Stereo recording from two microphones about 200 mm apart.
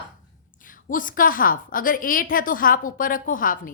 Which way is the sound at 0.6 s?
40° left (ahead or behind).